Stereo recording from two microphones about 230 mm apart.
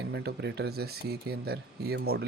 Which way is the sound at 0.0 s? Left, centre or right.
Right.